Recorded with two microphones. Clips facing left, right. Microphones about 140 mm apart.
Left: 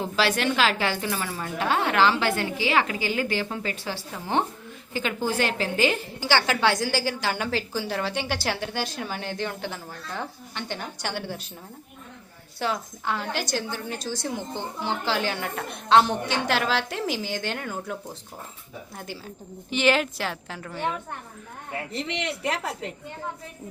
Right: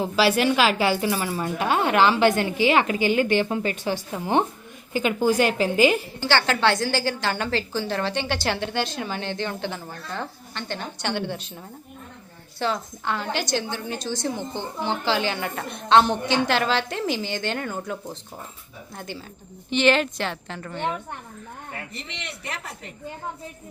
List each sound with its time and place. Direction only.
0.0 s speech: 5° right (ahead or behind)
6.1 s a woman's voice: 10° left (ahead or behind)
12.5 s a woman's voice: 10° left (ahead or behind)
21.9 s a woman's voice: 90° left